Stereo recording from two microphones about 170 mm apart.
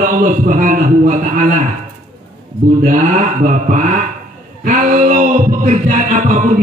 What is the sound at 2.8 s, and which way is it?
Music, 50° right (ahead or behind).